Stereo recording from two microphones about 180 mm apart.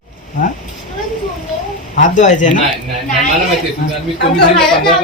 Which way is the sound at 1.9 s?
45° left (ahead or behind).